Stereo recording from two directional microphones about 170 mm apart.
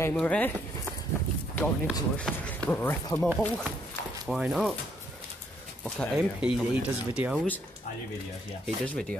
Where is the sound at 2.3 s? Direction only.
Centre (ahead or behind).